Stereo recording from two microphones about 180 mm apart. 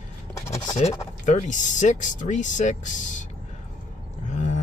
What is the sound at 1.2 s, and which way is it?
Speech, 40° left (ahead or behind).